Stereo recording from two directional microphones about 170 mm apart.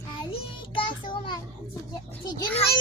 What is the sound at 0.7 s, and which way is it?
Child singing, 30° left (ahead or behind).